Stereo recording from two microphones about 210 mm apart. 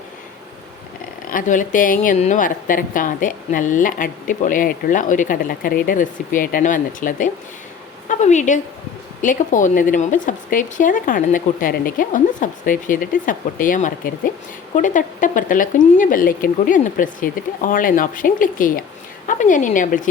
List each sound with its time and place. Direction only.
1.3 s a woman's voice: 40° left (ahead or behind)